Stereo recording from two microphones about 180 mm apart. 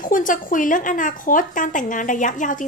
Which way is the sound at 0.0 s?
50° left (ahead or behind).